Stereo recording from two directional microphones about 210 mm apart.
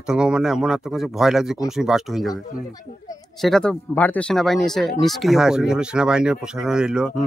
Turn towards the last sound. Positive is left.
turn(degrees=-5)  # may be behind; listen again after turning